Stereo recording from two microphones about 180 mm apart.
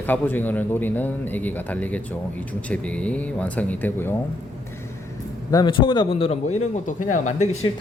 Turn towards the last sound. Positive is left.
turn(degrees=40)  # may be behind; listen again after turning